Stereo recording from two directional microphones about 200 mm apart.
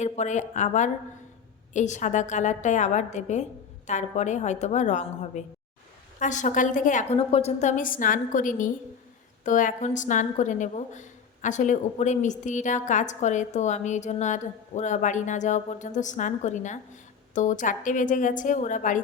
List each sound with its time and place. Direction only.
0.0 s a woman's voice: 35° left (ahead or behind)